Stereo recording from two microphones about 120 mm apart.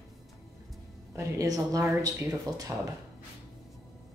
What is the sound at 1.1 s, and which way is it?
Speech, 30° right (ahead or behind).